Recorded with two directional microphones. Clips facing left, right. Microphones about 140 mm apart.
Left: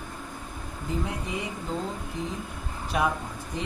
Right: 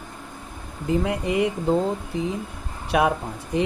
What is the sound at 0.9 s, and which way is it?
Speech, 70° right (ahead or behind).